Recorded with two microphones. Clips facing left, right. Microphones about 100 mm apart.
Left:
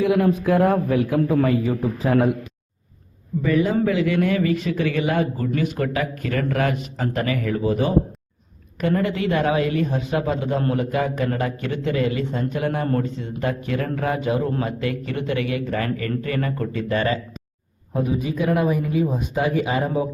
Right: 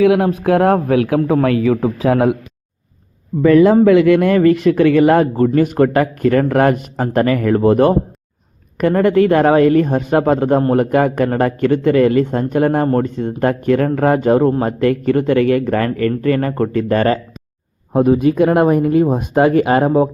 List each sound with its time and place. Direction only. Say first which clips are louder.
0.0 s a man's voice: right 6 dB; 70° right (ahead or behind)
3.4 s a man's voice: right 11 dB; 80° right; by 17.2 s 50° right (ahead or behind)
17.9 s speech: right 11 dB; 60° right (ahead or behind)